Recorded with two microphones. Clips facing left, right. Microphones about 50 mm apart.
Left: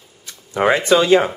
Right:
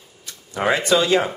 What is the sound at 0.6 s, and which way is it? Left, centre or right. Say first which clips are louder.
Speech: left 5 dB; left.